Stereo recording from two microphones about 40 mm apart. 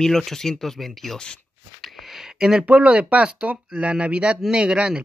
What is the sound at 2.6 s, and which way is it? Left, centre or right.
Speech, right.